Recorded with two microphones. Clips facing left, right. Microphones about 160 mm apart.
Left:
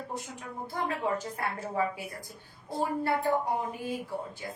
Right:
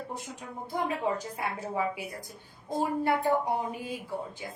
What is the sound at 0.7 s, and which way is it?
A woman's voice, 15° right (ahead or behind).